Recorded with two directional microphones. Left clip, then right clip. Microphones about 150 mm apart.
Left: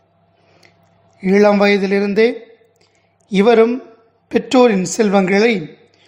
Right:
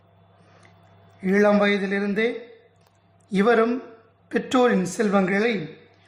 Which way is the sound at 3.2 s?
25° left (ahead or behind).